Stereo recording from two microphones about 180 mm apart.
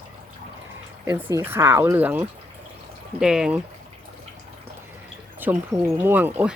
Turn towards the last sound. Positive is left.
turn(degrees=-10)  # may be behind; listen again after turning